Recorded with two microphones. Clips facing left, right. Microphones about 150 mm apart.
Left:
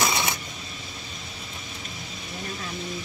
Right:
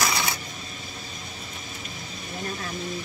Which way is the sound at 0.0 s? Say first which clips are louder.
Left 1 dB; 20° left (ahead or behind).